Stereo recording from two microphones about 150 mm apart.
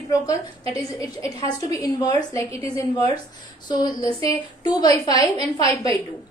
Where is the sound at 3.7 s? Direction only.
25° left (ahead or behind).